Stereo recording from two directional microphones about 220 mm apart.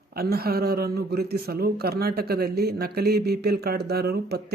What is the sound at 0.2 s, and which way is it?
Speech, 45° right (ahead or behind).